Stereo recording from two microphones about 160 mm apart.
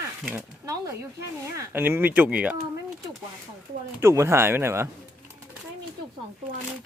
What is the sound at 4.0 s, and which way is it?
Speech, 15° right (ahead or behind).